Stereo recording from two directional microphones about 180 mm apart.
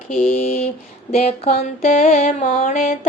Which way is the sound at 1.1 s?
35° left (ahead or behind).